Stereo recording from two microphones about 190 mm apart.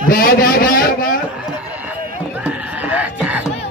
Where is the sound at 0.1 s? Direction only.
50° left (ahead or behind).